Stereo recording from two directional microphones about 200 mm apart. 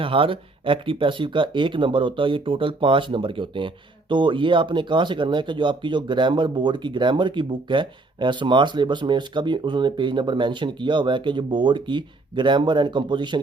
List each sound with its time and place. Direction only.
0.0 s speech: 25° right (ahead or behind)